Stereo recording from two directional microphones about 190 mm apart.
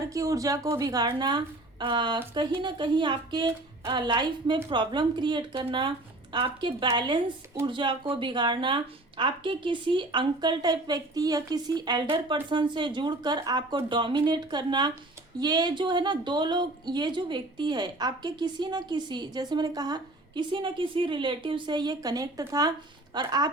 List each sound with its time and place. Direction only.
0.1 s a woman's voice: 15° right (ahead or behind)